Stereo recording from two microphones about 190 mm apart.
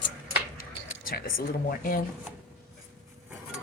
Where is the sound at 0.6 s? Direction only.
50° left (ahead or behind).